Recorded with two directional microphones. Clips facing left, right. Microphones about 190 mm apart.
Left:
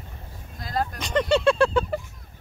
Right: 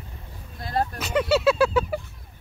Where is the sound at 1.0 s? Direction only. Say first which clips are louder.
Left 1 dB; 5° right (ahead or behind).